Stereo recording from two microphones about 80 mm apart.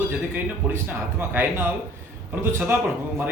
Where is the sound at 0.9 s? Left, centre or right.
Right.